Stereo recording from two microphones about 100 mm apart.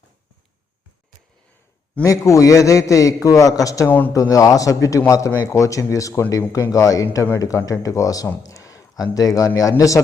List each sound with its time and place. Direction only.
2.0 s a man's voice: 30° left (ahead or behind)
3.8 s a man's voice: 20° left (ahead or behind)
4.1 s a man's voice: 35° left (ahead or behind)
8.4 s a sound: 35° left (ahead or behind)
9.1 s a man's voice: 35° left (ahead or behind)